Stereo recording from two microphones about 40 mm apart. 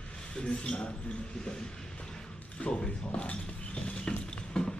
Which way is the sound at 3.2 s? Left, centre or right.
Left.